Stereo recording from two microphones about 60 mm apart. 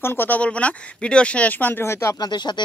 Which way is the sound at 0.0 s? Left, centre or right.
Left.